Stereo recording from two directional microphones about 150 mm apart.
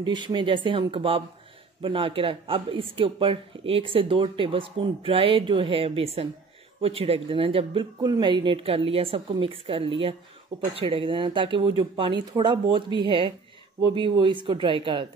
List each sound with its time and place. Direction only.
0.0 s speech: 30° right (ahead or behind)